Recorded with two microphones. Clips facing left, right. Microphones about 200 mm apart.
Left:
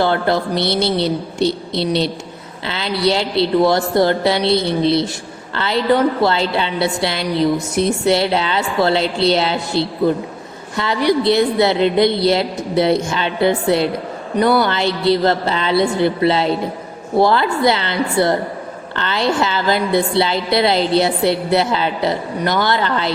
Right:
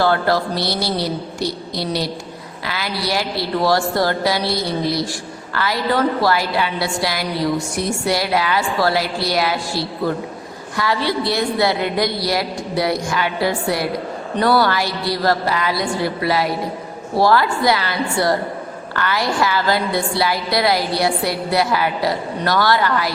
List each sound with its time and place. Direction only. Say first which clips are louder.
0.0 s a woman's voice: left 1 dB; 20° left (ahead or behind)